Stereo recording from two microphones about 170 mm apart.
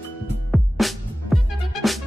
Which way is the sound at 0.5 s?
Centre (ahead or behind).